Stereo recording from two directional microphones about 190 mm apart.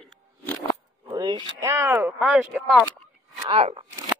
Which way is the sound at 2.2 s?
5° right (ahead or behind).